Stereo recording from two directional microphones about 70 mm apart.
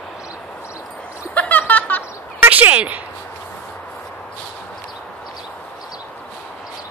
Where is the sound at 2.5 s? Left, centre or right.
Right.